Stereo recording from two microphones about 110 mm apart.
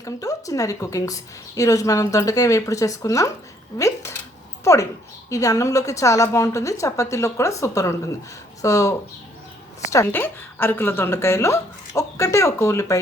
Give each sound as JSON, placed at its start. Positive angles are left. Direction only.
{"t": 0.0, "sound": "a woman's voice", "side_deg": 30}